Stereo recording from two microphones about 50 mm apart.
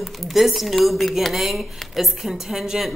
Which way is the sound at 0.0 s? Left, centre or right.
Centre.